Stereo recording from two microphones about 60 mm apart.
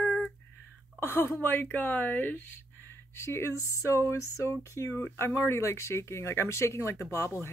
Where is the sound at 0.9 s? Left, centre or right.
Left.